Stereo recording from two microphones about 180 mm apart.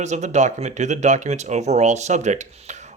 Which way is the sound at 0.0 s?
40° right (ahead or behind).